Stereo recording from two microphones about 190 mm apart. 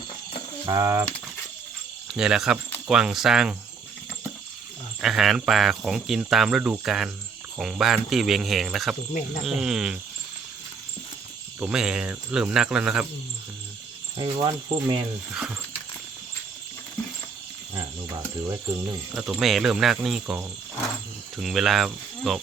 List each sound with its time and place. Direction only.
0.6 s speech: 20° right (ahead or behind)
2.1 s speech: 5° right (ahead or behind)
4.9 s speech: centre (ahead or behind)
11.6 s speech: 5° right (ahead or behind)
14.2 s speech: 20° right (ahead or behind)
15.3 s speech: 5° right (ahead or behind)
19.1 s speech: centre (ahead or behind)